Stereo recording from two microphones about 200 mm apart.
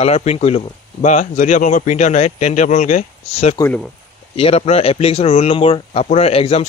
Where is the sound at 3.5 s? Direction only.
10° left (ahead or behind).